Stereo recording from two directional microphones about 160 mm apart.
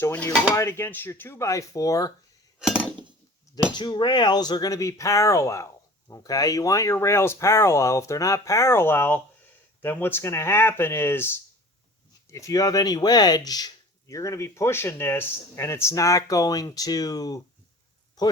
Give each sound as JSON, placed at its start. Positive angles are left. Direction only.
{"t": 0.0, "sound": "speech", "side_deg": 15}
{"t": 2.6, "sound": "chink", "side_deg": -5}
{"t": 3.8, "sound": "speech", "side_deg": 30}